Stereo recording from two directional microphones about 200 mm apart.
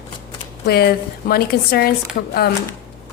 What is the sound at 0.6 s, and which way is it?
A woman's voice, 50° left (ahead or behind).